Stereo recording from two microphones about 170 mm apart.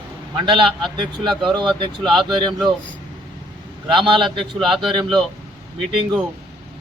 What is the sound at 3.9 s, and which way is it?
Speech, 30° right (ahead or behind).